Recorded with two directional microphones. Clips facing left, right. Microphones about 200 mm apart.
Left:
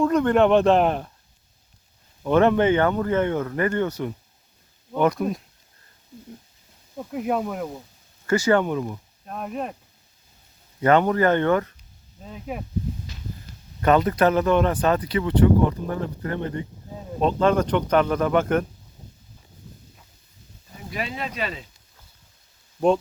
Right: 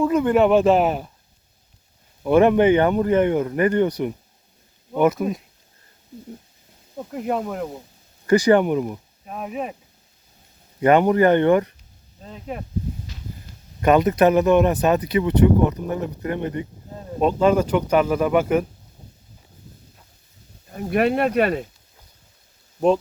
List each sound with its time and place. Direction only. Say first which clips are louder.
0.0 s speech: right 1 dB; 5° right (ahead or behind)
2.2 s speech: right 3 dB; 10° right (ahead or behind)
6.9 s speech: even; centre (ahead or behind)
8.3 s speech: right 4 dB; 15° right (ahead or behind)
10.8 s speech: right 3 dB; 15° right (ahead or behind)
12.2 s speech: right 1 dB; 5° left (ahead or behind)
13.8 s speech: right 3 dB; 15° right (ahead or behind)
20.7 s speech: right 12 dB; 60° right (ahead or behind)